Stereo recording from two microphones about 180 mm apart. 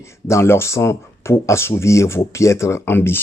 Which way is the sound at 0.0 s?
15° left (ahead or behind).